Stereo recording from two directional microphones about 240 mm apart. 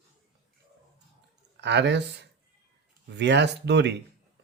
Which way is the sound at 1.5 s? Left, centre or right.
Right.